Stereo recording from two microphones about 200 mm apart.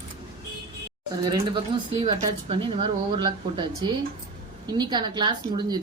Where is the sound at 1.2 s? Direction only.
20° right (ahead or behind).